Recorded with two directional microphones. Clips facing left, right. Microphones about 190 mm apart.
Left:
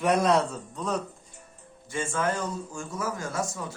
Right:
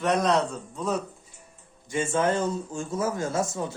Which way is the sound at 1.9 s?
20° right (ahead or behind).